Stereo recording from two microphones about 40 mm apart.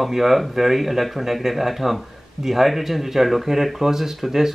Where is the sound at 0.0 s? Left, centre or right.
Centre.